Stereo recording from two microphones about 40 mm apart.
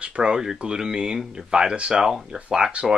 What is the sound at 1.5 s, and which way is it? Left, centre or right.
Speech, right.